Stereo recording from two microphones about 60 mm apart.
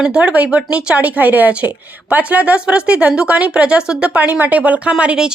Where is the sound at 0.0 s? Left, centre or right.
Centre.